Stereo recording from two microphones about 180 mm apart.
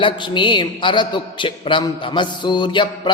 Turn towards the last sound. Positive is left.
turn(degrees=25)  # may be behind; listen again after turning